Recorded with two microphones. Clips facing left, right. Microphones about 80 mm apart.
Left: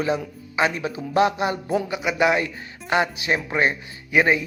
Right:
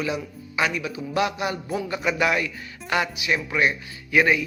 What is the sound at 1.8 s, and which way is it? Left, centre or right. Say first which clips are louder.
Speech: even; centre.